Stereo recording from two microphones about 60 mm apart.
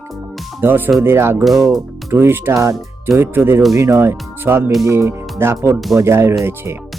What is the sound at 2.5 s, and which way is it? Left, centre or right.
Speech, right.